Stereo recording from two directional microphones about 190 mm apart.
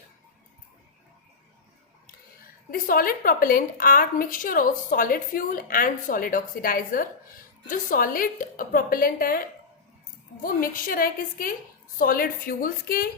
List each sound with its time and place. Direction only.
2.6 s a woman's voice: 50° left (ahead or behind)